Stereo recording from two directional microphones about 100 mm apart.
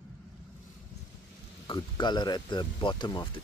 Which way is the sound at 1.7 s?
50° left (ahead or behind).